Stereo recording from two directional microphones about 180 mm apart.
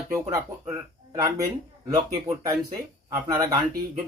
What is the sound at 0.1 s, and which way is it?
Speech, 20° right (ahead or behind).